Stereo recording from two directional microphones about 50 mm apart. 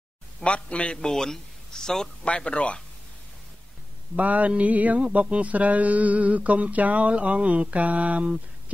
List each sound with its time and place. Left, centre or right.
0.4 s a man's voice: left
2.2 s speech: left
4.2 s mantra: right